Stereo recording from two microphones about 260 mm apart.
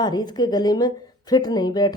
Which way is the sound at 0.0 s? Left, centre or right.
Centre.